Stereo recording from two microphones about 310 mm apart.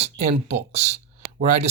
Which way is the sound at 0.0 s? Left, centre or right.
Right.